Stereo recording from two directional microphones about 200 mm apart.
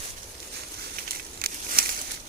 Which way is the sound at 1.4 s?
50° right (ahead or behind).